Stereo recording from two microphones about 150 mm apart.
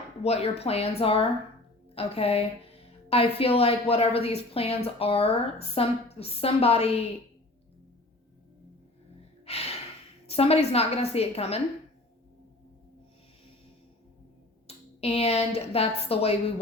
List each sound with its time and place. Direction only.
0.2 s a woman's voice: 45° left (ahead or behind)
9.5 s gasp: 45° left (ahead or behind)
10.2 s a woman's voice: 40° left (ahead or behind)
14.7 s speech: 45° left (ahead or behind)